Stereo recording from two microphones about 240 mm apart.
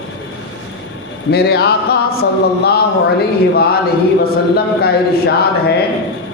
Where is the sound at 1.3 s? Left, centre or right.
Left.